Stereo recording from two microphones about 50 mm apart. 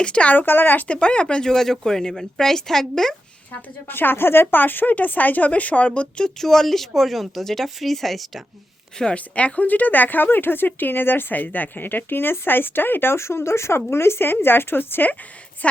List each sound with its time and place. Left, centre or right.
0.0 s speech: left
0.3 s speech: left
0.9 s speech: left
3.8 s speech: left
6.4 s speech: centre
9.1 s speech: left